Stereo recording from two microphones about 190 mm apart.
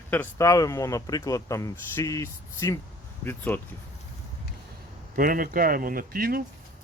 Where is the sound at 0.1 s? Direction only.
15° left (ahead or behind).